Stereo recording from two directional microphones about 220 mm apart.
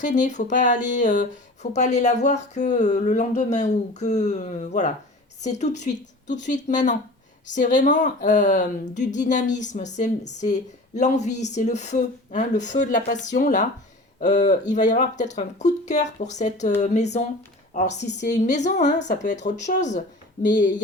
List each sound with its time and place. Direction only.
0.0 s speech: 35° left (ahead or behind)
17.9 s a woman's voice: 50° left (ahead or behind)
18.3 s speech: 35° left (ahead or behind)